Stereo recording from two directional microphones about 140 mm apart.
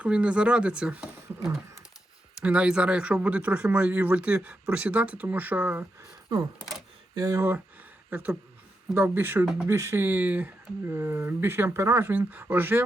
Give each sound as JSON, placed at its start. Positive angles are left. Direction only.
{"t": 0.0, "sound": "speech", "side_deg": -10}
{"t": 2.4, "sound": "speech", "side_deg": -10}
{"t": 7.2, "sound": "speech", "side_deg": -20}